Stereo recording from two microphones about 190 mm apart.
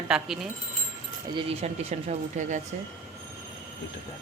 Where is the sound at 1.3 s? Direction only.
30° right (ahead or behind).